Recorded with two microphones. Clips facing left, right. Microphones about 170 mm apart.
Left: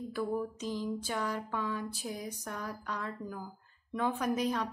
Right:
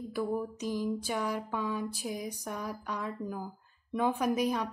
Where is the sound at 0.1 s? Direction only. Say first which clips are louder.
Right 2 dB; 10° right (ahead or behind).